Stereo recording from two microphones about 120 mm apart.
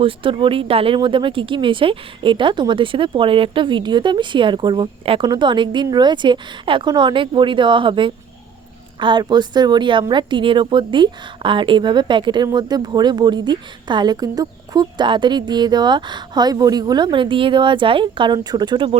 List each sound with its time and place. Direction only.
0.0 s a woman's voice: 45° right (ahead or behind)